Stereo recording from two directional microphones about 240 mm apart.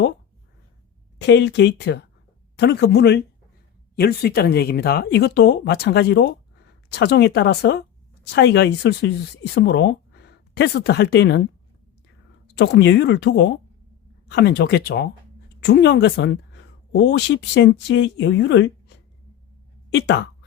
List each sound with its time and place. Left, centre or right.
1.2 s speech: left
12.5 s speech: left